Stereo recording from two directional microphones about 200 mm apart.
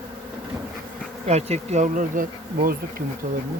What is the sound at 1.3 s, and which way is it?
Speech, 35° right (ahead or behind).